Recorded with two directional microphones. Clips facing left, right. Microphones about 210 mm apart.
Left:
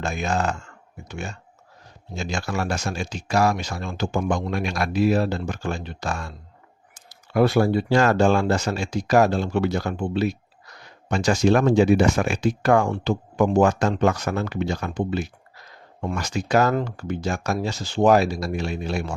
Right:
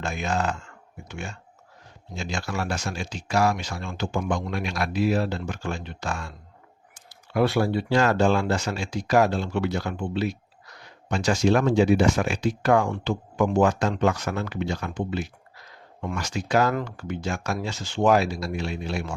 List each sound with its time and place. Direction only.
0.0 s speech: 45° left (ahead or behind)